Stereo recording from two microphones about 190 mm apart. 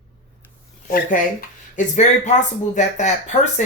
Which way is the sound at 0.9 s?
45° left (ahead or behind).